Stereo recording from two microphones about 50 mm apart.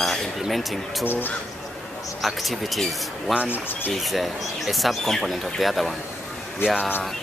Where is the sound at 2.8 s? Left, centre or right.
Centre.